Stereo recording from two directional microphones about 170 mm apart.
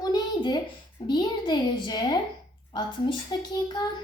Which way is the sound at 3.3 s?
25° left (ahead or behind).